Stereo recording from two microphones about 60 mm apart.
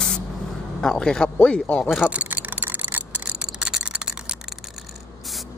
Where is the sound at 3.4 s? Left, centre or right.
Centre.